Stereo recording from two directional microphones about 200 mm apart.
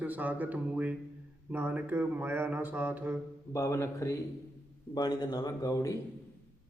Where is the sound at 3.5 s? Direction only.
15° left (ahead or behind).